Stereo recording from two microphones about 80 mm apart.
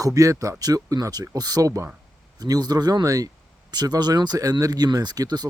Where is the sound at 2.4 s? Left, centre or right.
Right.